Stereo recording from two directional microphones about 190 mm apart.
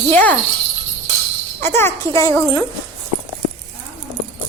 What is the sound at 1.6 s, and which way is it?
Speech, 10° left (ahead or behind).